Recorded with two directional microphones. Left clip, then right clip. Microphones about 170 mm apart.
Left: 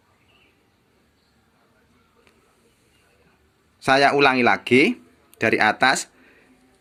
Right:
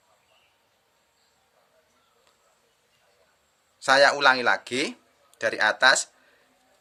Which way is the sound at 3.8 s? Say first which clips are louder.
Left 2 dB; 10° left (ahead or behind).